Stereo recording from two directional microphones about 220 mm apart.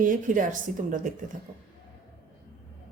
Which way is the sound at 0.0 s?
35° right (ahead or behind).